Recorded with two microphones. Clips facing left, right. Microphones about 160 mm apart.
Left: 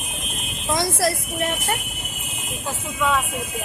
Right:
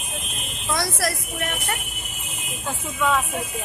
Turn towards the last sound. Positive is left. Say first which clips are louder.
# even
turn(degrees=0)  # may be behind; listen again after turning